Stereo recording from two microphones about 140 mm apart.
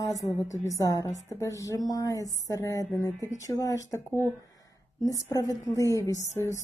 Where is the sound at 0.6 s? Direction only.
25° left (ahead or behind).